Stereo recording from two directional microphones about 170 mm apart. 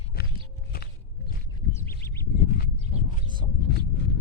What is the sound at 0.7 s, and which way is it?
Walk, 60° left (ahead or behind).